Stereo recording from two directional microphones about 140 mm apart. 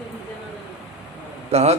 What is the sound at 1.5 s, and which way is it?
Speech, 50° right (ahead or behind).